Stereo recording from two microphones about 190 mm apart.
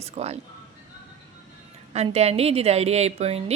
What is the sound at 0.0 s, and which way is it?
Speech, 35° right (ahead or behind).